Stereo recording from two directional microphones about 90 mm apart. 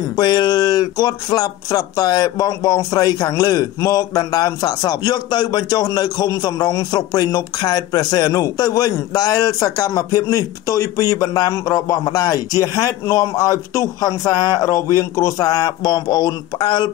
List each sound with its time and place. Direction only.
0.1 s speech: 50° left (ahead or behind)